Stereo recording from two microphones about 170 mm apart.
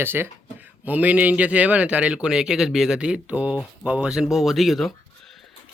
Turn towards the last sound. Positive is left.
turn(degrees=0)  # may be behind; listen again after turning